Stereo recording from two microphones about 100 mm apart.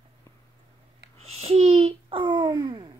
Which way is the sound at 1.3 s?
90° right.